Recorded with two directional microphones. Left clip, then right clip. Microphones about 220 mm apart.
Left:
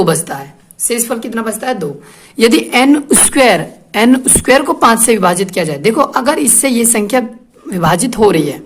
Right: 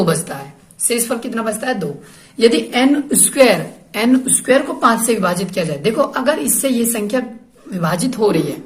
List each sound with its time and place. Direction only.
0.0 s a woman's voice: 30° left (ahead or behind)